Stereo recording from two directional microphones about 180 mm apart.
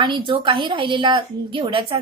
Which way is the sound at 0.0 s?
25° right (ahead or behind).